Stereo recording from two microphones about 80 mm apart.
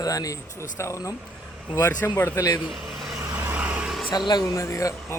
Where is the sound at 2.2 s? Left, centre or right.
Left.